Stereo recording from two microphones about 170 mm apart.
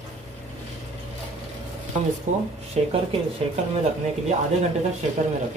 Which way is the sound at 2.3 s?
45° right (ahead or behind).